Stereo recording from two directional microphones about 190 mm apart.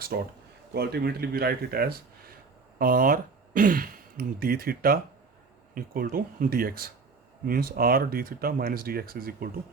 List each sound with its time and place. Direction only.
0.1 s speech: 55° right (ahead or behind)